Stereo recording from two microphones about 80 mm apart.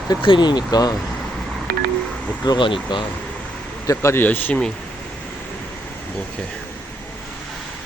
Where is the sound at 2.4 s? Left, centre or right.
Left.